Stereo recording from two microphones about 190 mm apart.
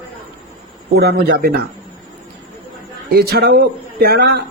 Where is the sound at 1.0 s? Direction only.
55° right (ahead or behind).